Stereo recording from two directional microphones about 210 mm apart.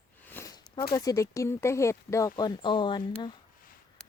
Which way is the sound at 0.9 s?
15° left (ahead or behind).